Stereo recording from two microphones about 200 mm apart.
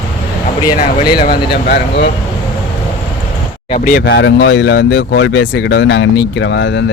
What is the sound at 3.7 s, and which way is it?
Speech, 40° left (ahead or behind).